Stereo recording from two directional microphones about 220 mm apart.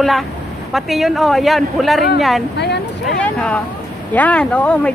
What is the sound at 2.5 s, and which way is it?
Speech, 50° left (ahead or behind).